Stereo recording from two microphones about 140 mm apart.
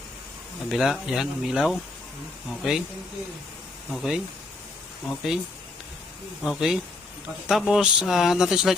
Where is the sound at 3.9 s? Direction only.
Centre (ahead or behind).